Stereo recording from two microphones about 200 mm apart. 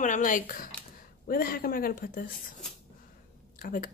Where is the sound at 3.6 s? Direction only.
45° left (ahead or behind).